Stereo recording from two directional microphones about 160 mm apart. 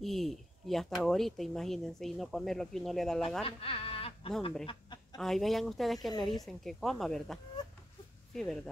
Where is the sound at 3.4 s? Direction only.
35° left (ahead or behind).